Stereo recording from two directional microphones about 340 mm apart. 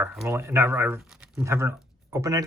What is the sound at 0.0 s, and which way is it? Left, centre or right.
Speech, centre.